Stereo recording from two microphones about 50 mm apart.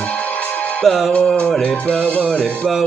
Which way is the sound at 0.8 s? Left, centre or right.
Centre.